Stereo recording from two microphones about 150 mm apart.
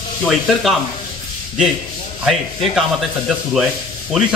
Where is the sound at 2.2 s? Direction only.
5° right (ahead or behind).